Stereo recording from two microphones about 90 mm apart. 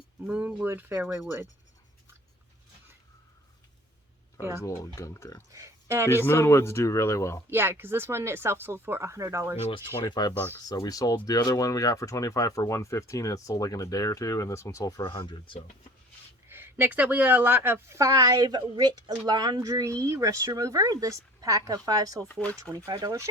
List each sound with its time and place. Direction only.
0.3 s speech: 15° right (ahead or behind)
4.6 s speech: 35° left (ahead or behind)
5.5 s speech: 35° right (ahead or behind)
6.1 s speech: 30° left (ahead or behind)
7.5 s speech: 25° right (ahead or behind)
9.6 s speech: 65° left (ahead or behind)
10.8 s speech: 45° left (ahead or behind)
15.1 s speech: 75° left (ahead or behind)
16.5 s speech: 25° right (ahead or behind)
18.2 s a woman's voice: 45° right (ahead or behind)
22.2 s speech: 15° left (ahead or behind)
22.9 s a woman's voice: 45° right (ahead or behind)